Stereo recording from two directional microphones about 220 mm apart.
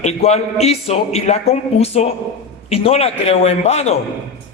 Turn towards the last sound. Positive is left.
turn(degrees=30)  # may be behind; listen again after turning